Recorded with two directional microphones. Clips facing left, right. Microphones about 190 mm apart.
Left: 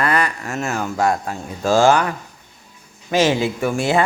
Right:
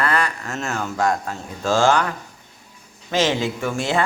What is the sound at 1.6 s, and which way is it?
Speech, 15° left (ahead or behind).